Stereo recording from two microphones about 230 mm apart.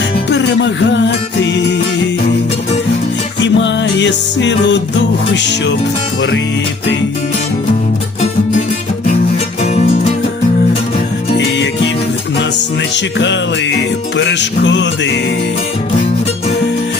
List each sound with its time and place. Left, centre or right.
0.3 s music: left
3.4 s music: left
11.3 s music: left
13.1 s music: left